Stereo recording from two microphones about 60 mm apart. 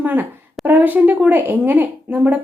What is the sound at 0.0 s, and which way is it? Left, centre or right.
Speech, right.